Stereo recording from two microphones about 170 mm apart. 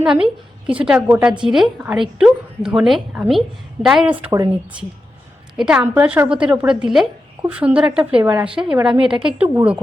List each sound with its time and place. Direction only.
0.0 s a woman's voice: 5° right (ahead or behind)
4.3 s speech: 20° right (ahead or behind)
5.5 s a woman's voice: 5° right (ahead or behind)